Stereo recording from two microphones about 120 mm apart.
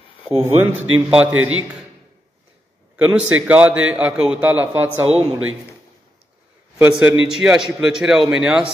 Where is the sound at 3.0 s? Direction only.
10° right (ahead or behind).